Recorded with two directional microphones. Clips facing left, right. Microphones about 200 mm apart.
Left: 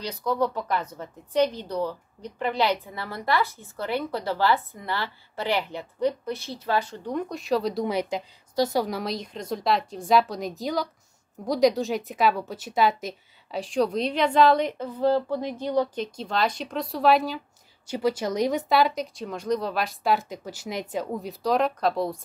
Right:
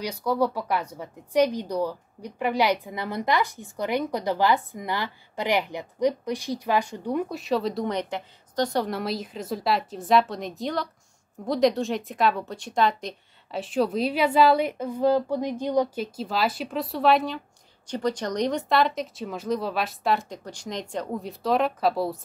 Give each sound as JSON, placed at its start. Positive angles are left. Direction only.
{"t": 0.0, "sound": "a woman's voice", "side_deg": -10}